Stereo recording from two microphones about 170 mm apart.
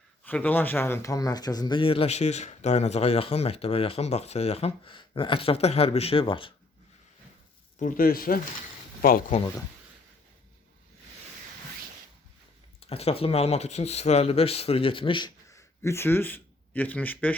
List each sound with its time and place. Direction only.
0.3 s speech: 10° left (ahead or behind); by 6.5 s 30° left (ahead or behind)
7.8 s speech: 55° left (ahead or behind)
12.8 s speech: 35° left (ahead or behind); by 17.3 s 10° left (ahead or behind)